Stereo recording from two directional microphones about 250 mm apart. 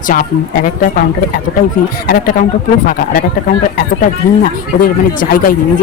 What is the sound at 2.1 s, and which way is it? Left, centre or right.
Speech, left.